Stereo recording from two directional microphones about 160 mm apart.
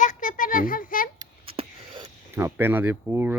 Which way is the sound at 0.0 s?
55° left (ahead or behind).